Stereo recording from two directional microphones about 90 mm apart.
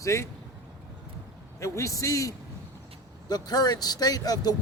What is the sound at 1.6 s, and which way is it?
Speech, 35° left (ahead or behind).